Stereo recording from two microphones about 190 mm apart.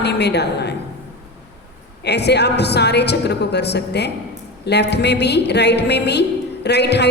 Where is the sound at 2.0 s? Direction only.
60° left (ahead or behind).